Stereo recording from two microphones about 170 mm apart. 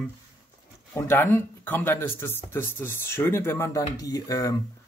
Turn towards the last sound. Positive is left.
turn(degrees=20)  # may be behind; listen again after turning